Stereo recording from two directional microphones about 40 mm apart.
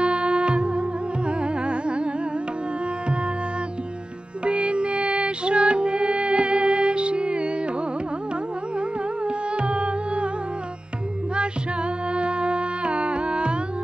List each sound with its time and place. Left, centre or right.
0.0 s music: right
4.5 s music: right
8.7 s music: right
12.1 s music: right